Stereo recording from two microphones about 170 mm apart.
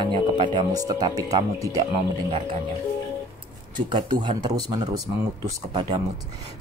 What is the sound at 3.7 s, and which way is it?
Speech, 25° right (ahead or behind).